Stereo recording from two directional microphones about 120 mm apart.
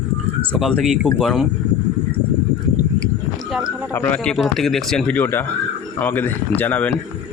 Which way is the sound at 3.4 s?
5° right (ahead or behind).